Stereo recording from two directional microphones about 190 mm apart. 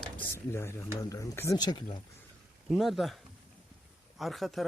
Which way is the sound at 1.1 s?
15° left (ahead or behind).